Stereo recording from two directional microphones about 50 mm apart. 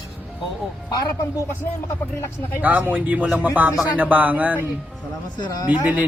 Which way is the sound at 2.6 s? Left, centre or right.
Right.